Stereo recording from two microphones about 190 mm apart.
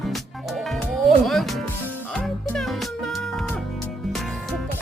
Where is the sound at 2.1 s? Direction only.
5° left (ahead or behind).